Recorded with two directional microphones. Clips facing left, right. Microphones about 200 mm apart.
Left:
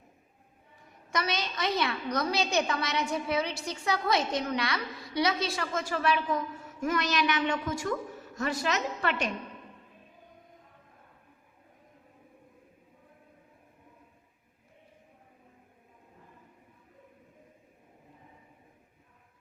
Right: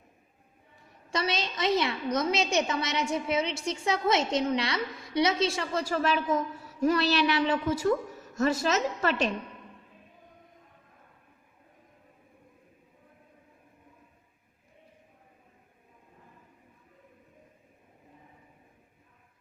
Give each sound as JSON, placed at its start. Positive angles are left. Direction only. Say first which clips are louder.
{"t": 1.1, "sound": "a woman's voice", "louder": "right 1 dB", "side_deg": -25}
{"t": 5.8, "sound": "a woman's voice", "louder": "right 1 dB", "side_deg": -40}